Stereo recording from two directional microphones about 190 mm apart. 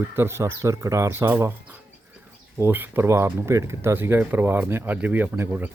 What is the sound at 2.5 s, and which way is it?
Speech, 10° right (ahead or behind).